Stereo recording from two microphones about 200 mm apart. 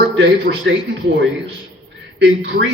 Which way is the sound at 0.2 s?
60° right (ahead or behind).